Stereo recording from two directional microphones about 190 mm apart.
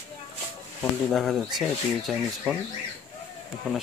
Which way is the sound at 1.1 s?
Centre (ahead or behind).